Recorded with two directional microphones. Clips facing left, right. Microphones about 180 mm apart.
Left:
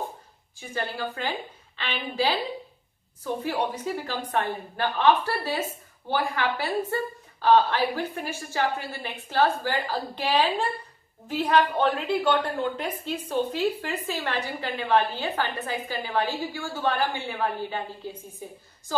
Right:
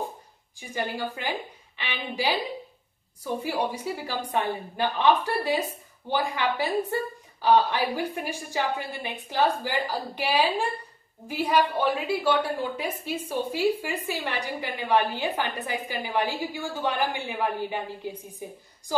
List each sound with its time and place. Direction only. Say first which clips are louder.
0.6 s a woman's voice: right 1 dB; 15° right (ahead or behind)
3.4 s a woman's voice: left 1 dB; 10° right (ahead or behind)